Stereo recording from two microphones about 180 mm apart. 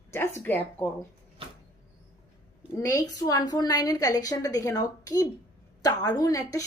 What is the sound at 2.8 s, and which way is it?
Speech, 20° left (ahead or behind).